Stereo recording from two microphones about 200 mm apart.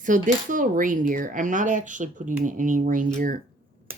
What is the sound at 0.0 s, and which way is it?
Speech, 40° right (ahead or behind).